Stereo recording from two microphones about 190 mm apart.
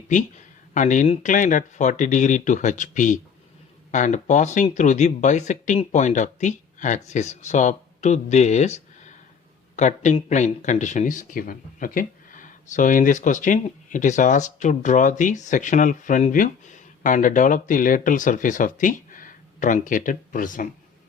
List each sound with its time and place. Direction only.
0.7 s speech: 40° left (ahead or behind)